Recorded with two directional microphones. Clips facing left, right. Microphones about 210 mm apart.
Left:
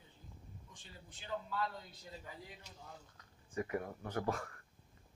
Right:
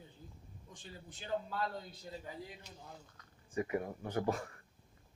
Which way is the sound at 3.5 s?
15° right (ahead or behind).